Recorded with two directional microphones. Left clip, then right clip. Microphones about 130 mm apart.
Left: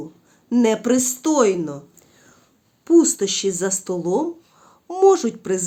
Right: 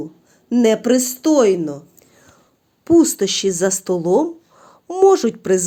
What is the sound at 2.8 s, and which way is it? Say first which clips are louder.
A child's voice: right 2 dB; 40° right (ahead or behind).